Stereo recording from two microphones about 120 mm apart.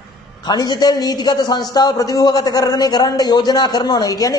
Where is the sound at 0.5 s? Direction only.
35° left (ahead or behind).